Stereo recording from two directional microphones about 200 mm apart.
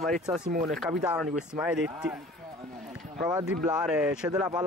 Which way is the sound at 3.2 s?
20° right (ahead or behind).